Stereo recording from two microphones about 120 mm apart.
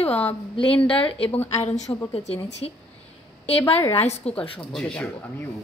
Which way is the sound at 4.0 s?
65° left (ahead or behind).